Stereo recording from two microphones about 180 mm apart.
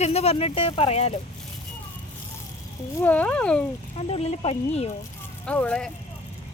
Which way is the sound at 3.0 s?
10° left (ahead or behind).